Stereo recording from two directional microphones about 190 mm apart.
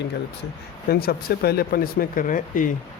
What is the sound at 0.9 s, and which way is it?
Speech, 55° left (ahead or behind).